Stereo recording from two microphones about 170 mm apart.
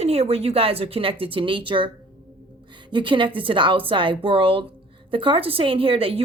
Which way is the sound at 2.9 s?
30° right (ahead or behind).